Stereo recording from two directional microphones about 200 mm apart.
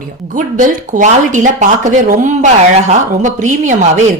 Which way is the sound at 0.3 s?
40° right (ahead or behind).